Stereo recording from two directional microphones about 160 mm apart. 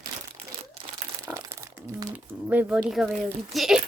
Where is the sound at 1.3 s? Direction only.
25° right (ahead or behind).